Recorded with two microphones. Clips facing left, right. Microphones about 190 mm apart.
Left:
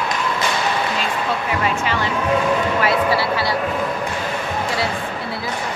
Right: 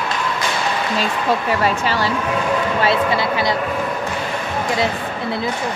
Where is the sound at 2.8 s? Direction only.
25° right (ahead or behind).